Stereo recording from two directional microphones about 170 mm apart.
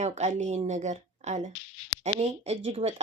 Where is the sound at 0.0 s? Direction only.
40° right (ahead or behind).